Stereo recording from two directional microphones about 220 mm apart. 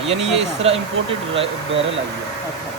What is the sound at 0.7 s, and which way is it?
Speech, 25° right (ahead or behind).